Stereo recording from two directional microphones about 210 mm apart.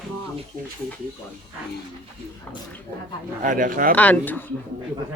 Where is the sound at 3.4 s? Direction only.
40° right (ahead or behind).